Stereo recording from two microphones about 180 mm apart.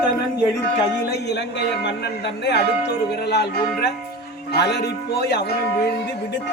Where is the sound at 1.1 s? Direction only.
70° left (ahead or behind).